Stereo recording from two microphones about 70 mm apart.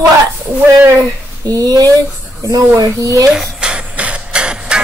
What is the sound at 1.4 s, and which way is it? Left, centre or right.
Speech, right.